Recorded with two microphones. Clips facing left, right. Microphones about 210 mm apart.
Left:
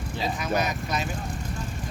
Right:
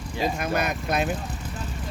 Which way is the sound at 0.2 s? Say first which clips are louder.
Right 2 dB; 55° right (ahead or behind).